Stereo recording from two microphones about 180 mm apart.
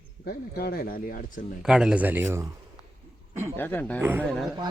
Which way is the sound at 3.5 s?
10° left (ahead or behind).